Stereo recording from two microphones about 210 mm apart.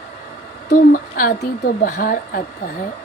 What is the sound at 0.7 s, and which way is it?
A woman's voice, 40° left (ahead or behind).